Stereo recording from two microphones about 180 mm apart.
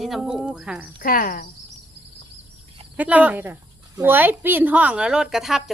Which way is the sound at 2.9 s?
10° right (ahead or behind).